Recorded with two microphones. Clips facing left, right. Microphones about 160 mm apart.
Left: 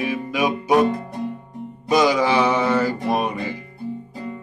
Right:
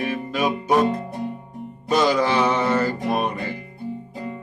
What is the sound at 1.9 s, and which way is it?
Mantra, 10° left (ahead or behind).